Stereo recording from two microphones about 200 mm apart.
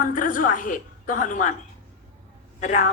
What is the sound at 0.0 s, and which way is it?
A woman's voice, 40° left (ahead or behind).